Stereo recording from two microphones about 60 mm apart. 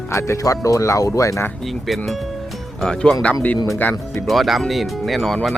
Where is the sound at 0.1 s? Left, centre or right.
Left.